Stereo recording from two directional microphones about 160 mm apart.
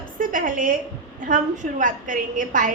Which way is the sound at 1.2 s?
50° right (ahead or behind).